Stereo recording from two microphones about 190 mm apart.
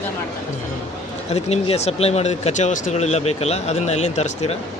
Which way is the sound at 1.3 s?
35° left (ahead or behind).